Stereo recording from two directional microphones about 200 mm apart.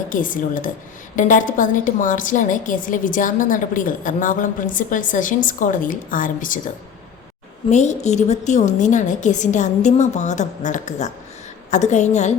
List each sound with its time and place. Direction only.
0.1 s a woman's voice: 40° left (ahead or behind)
7.7 s a woman's voice: 35° left (ahead or behind)